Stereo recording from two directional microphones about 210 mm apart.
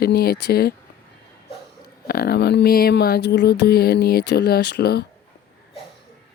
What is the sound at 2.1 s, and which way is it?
Speech, 50° left (ahead or behind).